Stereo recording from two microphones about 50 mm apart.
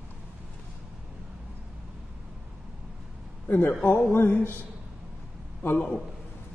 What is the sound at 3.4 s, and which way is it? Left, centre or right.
Speech, left.